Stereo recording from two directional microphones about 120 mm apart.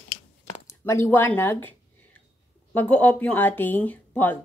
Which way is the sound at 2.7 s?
10° left (ahead or behind).